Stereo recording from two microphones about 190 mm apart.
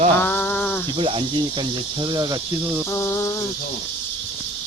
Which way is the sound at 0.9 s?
30° right (ahead or behind).